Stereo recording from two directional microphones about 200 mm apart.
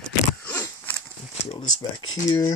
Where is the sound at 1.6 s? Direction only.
90° left.